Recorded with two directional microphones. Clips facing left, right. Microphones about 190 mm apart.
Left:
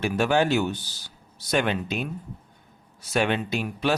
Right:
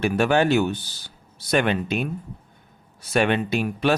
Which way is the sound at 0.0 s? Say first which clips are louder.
Right 3 dB; 60° right (ahead or behind).